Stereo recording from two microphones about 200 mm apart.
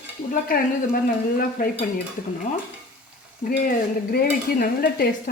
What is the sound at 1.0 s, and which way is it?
Speech, 45° left (ahead or behind).